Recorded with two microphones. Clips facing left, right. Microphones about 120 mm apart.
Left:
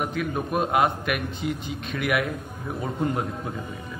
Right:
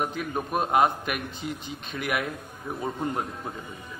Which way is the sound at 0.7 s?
35° right (ahead or behind).